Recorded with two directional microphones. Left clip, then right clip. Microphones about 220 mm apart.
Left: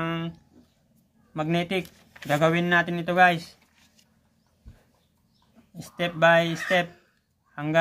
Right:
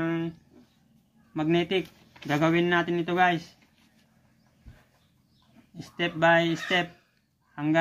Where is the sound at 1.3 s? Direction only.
20° left (ahead or behind).